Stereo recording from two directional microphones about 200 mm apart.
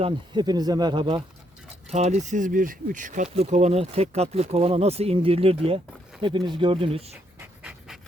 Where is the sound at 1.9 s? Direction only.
35° right (ahead or behind).